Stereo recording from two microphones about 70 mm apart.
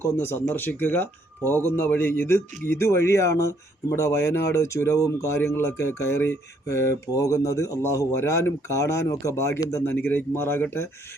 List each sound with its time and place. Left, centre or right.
0.0 s speech: left
7.2 s speech: left